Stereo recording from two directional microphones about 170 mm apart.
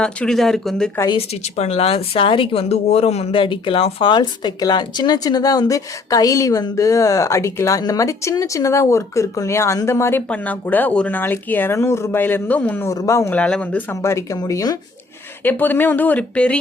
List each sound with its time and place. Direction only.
0.0 s speech: 5° left (ahead or behind)
1.1 s speech: 40° left (ahead or behind); by 14.8 s 20° left (ahead or behind)
15.4 s speech: 10° left (ahead or behind)